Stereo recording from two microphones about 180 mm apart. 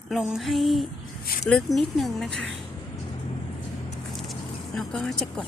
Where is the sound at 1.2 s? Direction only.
50° left (ahead or behind).